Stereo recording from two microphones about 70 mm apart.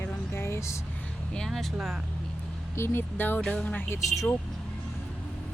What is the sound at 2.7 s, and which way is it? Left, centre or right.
Speech, left.